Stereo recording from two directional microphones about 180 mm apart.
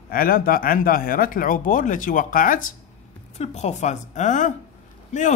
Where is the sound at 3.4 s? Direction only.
40° left (ahead or behind).